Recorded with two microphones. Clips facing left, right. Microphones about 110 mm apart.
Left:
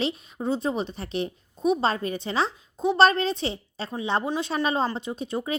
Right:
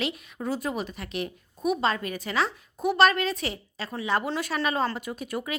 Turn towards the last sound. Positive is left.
turn(degrees=25)  # may be behind; listen again after turning